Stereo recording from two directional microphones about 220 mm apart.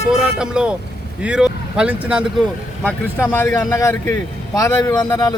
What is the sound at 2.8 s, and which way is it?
Speech, 10° left (ahead or behind).